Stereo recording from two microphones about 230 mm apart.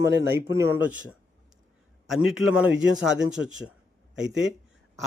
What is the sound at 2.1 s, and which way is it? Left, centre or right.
Speech, centre.